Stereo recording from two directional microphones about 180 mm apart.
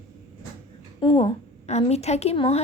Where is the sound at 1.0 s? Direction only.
30° left (ahead or behind).